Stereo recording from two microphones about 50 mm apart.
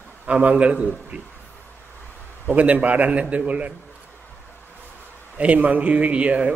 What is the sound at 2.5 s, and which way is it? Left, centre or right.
A man's voice, right.